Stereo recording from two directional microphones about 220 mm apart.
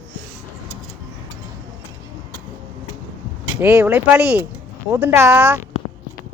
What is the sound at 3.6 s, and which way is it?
Speech, 10° right (ahead or behind).